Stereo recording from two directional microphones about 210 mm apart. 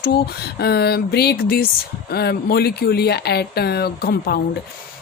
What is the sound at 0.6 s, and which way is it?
Speech, 50° left (ahead or behind).